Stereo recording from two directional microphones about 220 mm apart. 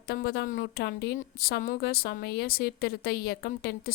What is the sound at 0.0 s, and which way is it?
A woman's voice, 45° left (ahead or behind).